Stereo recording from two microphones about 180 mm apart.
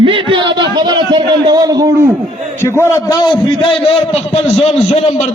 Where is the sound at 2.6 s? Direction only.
15° left (ahead or behind).